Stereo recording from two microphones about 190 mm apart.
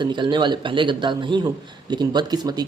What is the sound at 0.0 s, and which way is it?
Speech, 25° right (ahead or behind).